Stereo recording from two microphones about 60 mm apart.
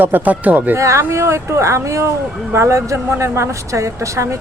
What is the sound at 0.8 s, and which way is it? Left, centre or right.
A woman's voice, right.